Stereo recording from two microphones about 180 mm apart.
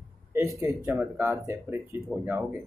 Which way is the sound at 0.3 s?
15° right (ahead or behind).